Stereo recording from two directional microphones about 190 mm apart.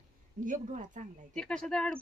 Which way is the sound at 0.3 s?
45° right (ahead or behind).